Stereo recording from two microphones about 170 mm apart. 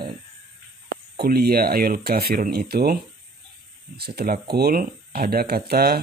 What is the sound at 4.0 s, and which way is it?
Speech, 65° right (ahead or behind).